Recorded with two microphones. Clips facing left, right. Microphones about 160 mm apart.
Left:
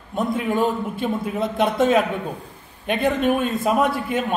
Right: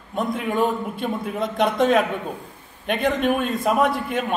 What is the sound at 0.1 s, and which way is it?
A man's voice, centre (ahead or behind).